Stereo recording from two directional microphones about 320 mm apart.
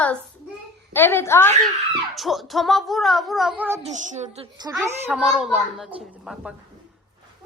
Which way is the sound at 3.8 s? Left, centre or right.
Right.